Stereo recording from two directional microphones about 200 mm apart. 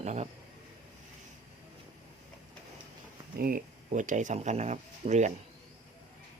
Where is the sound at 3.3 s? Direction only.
45° right (ahead or behind).